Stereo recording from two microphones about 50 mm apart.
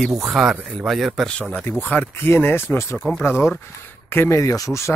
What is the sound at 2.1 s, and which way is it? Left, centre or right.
Speech, left.